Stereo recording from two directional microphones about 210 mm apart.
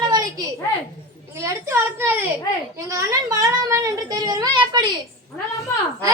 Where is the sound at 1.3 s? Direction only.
15° right (ahead or behind).